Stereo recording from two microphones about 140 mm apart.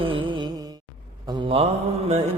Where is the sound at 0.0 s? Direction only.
40° right (ahead or behind).